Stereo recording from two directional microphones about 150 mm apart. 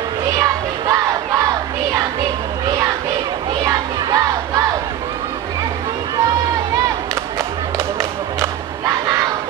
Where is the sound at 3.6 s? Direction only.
20° right (ahead or behind).